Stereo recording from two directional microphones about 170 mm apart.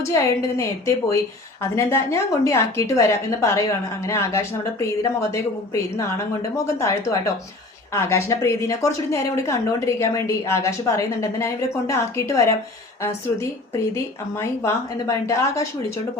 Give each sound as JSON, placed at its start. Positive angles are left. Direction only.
{"t": 0.0, "sound": "a woman's voice", "side_deg": 15}
{"t": 13.9, "sound": "speech", "side_deg": 15}